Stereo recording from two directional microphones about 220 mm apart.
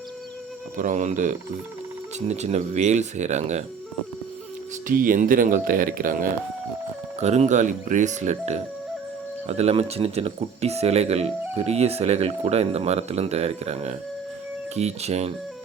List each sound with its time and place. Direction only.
0.8 s speech: 35° right (ahead or behind)
4.9 s speech: 40° right (ahead or behind)